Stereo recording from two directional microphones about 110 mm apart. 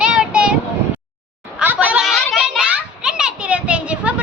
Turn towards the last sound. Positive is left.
turn(degrees=-10)  # may be behind; listen again after turning